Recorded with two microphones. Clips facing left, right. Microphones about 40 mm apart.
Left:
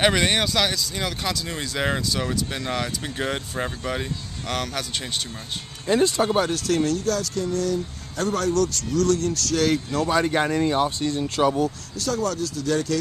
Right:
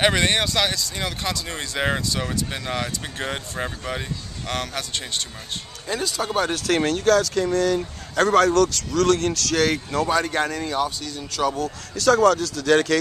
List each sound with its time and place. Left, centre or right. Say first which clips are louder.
0.0 s speech: even; centre
6.0 s speech: left 5 dB; left
6.7 s speech: right 7 dB; right
9.9 s speech: right 1 dB; centre
11.0 s speech: left 6 dB; left
11.4 s speech: left 2 dB; centre
12.0 s speech: right 8 dB; right